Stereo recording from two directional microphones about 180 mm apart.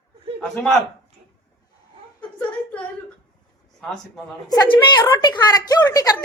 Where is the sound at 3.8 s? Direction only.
5° left (ahead or behind).